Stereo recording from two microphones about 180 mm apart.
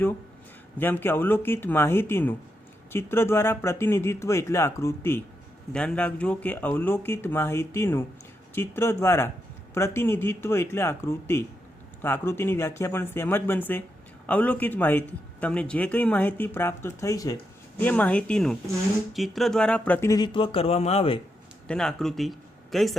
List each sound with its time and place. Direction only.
0.8 s a man's voice: 10° left (ahead or behind); by 21.2 s 35° left (ahead or behind)
21.7 s speech: 5° left (ahead or behind)